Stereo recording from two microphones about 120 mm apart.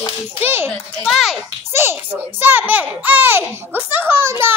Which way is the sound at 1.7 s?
20° right (ahead or behind).